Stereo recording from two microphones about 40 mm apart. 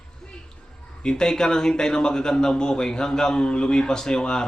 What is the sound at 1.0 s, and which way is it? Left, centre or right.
A man's voice, centre.